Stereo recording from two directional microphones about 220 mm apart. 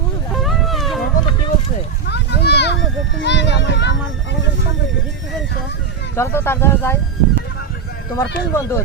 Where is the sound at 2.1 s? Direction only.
50° left (ahead or behind).